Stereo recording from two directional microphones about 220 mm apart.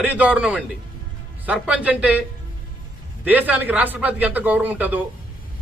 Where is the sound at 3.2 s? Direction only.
5° right (ahead or behind).